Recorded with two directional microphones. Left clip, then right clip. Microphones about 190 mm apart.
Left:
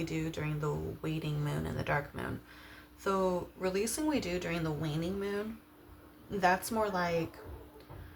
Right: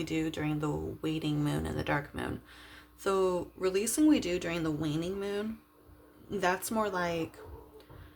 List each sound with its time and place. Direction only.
0.0 s speech: 50° right (ahead or behind)
6.4 s speech: 50° right (ahead or behind)